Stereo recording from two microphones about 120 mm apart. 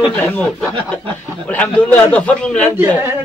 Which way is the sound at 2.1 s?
10° left (ahead or behind).